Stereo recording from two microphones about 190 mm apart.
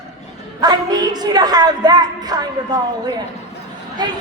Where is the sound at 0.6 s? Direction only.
20° right (ahead or behind).